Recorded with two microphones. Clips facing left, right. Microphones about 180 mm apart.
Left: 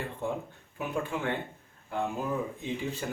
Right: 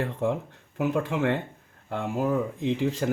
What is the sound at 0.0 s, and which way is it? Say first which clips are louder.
Speech: right 7 dB; 90° right.